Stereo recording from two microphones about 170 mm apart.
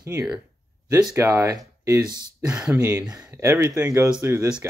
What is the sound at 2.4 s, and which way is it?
Speech, 5° right (ahead or behind).